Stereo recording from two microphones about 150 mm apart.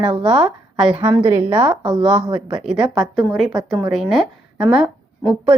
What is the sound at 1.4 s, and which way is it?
Speech, 35° right (ahead or behind).